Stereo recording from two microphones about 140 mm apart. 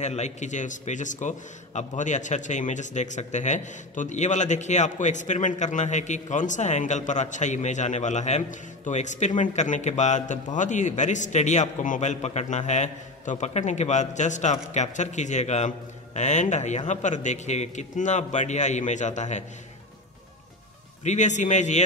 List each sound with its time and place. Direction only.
0.0 s a man's voice: 55° left (ahead or behind)
21.0 s a man's voice: 55° left (ahead or behind)